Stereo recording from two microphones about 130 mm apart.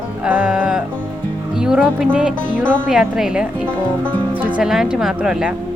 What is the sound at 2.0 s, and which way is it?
Music, 10° right (ahead or behind).